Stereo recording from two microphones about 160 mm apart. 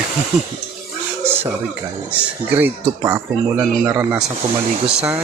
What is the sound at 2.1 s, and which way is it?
Speech, 10° right (ahead or behind).